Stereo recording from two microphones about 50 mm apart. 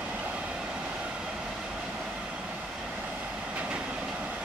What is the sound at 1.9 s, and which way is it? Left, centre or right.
Vehicle, centre.